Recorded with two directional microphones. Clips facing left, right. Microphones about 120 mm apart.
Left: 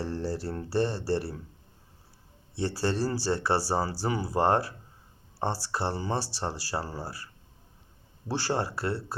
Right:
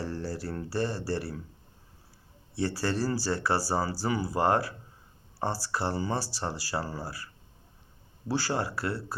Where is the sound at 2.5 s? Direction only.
25° left (ahead or behind).